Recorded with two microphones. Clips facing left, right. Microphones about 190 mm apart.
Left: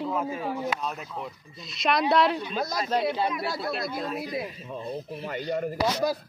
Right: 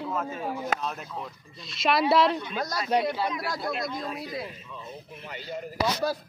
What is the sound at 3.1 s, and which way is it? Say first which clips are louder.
Speech: left 2 dB; 20° left (ahead or behind).